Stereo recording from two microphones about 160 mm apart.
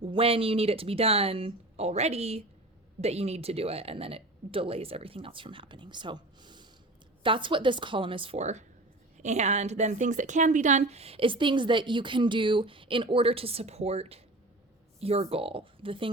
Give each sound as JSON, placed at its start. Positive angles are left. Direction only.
{"t": 0.0, "sound": "a woman's voice", "side_deg": -35}